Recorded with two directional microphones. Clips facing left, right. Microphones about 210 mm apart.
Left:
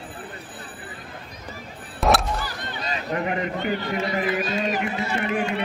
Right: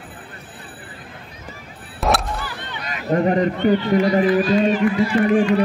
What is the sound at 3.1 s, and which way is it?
Speech, 35° right (ahead or behind).